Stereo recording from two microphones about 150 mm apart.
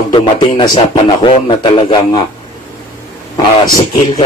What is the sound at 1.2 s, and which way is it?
A man's voice, 35° left (ahead or behind).